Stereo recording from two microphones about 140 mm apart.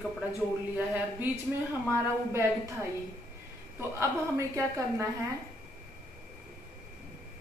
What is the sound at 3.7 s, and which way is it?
A woman's voice, 20° right (ahead or behind).